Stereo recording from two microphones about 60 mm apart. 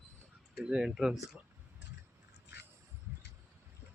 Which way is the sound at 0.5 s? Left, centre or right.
Centre.